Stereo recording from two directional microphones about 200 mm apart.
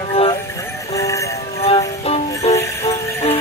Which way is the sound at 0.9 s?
15° left (ahead or behind).